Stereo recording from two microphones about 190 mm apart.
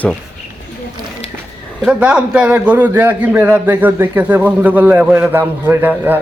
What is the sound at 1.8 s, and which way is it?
A man's voice, 5° right (ahead or behind).